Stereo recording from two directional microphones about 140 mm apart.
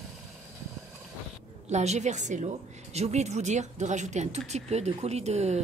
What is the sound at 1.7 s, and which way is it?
A woman's voice, 55° right (ahead or behind).